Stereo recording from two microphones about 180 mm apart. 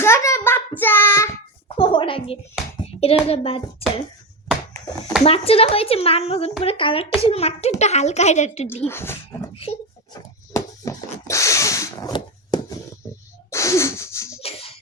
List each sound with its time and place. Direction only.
0.0 s child singing: 15° left (ahead or behind)
1.7 s a sound: 25° left (ahead or behind)
2.8 s hands: 35° left (ahead or behind)
3.2 s a child's voice: 35° left (ahead or behind)
5.2 s a child's voice: 35° left (ahead or behind)
8.8 s speech: 15° left (ahead or behind)
10.5 s a sound: 15° left (ahead or behind)
14.4 s music: 30° left (ahead or behind)